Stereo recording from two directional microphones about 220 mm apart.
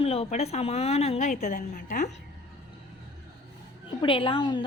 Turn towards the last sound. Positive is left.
turn(degrees=20)  # may be behind; listen again after turning